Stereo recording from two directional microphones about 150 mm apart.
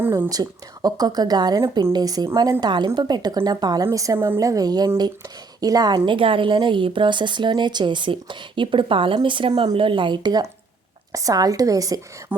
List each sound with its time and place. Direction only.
0.0 s a woman's voice: 15° right (ahead or behind)
12.3 s speech: 10° right (ahead or behind)